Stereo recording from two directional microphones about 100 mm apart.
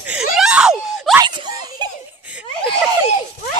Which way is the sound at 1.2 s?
45° right (ahead or behind).